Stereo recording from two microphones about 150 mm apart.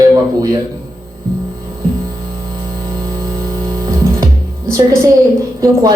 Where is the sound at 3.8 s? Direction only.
25° right (ahead or behind).